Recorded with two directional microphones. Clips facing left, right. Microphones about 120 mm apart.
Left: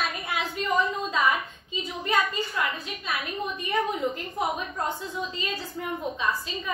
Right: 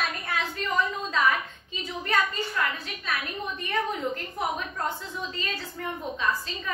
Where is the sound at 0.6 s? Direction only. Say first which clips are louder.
Left 4 dB; 20° left (ahead or behind).